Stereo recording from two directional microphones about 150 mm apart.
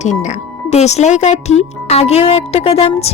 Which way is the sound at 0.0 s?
50° left (ahead or behind).